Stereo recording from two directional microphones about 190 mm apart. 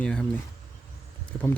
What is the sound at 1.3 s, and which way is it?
Speech, 10° left (ahead or behind).